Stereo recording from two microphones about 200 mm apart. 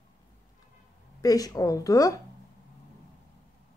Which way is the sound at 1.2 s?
20° left (ahead or behind).